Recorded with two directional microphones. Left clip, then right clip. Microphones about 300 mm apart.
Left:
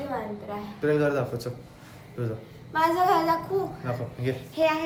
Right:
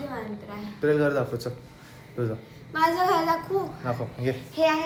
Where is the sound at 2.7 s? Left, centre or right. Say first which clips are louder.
Even; centre.